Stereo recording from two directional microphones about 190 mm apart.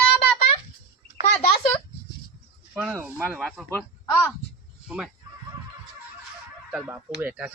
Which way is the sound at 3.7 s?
10° left (ahead or behind).